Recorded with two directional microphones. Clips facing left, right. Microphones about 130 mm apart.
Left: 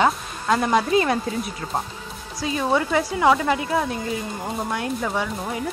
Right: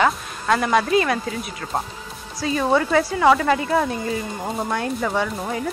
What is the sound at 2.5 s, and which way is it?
A woman's voice, 5° left (ahead or behind).